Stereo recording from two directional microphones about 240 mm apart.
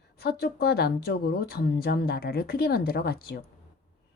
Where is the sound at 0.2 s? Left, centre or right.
Left.